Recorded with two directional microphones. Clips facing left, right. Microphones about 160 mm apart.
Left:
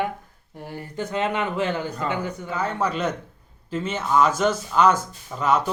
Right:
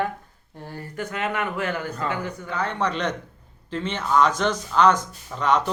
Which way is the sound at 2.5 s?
10° left (ahead or behind).